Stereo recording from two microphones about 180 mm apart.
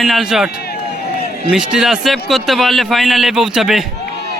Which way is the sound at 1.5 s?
5° right (ahead or behind).